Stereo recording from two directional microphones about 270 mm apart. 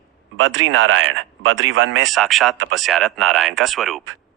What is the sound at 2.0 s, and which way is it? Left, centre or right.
Speech, centre.